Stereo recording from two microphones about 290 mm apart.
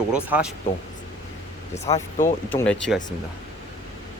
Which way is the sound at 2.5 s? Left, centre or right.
Centre.